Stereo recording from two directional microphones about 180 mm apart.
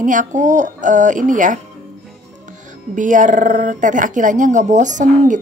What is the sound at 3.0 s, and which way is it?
Speech, 45° right (ahead or behind).